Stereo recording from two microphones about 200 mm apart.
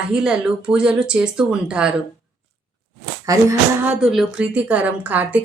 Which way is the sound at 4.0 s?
Centre (ahead or behind).